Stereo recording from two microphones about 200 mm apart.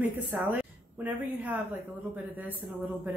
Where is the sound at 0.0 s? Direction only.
10° right (ahead or behind).